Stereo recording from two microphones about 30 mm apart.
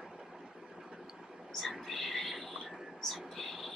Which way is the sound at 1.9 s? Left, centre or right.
Centre.